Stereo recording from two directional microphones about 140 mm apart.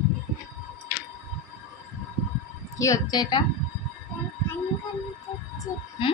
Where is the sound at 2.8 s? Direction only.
25° left (ahead or behind).